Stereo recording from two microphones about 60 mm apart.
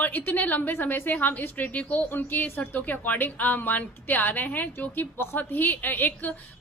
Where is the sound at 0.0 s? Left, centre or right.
Left.